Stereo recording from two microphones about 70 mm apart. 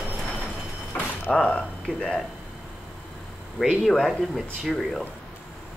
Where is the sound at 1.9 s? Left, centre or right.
Centre.